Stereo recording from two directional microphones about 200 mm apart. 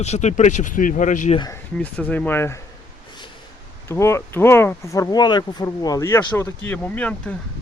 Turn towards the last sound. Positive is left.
turn(degrees=5)  # may be behind; listen again after turning